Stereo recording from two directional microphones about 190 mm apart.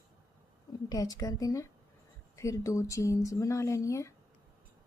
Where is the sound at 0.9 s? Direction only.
20° left (ahead or behind).